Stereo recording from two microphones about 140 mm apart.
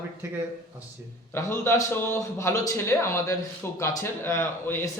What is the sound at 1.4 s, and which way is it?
A man's voice, 20° left (ahead or behind).